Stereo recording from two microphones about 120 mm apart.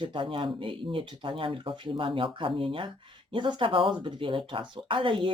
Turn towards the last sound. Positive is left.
turn(degrees=-45)  # may be behind; listen again after turning